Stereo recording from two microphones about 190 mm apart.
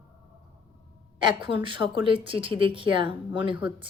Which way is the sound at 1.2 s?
25° right (ahead or behind).